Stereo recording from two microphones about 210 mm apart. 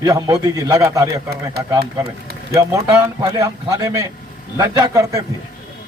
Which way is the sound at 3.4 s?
15° right (ahead or behind).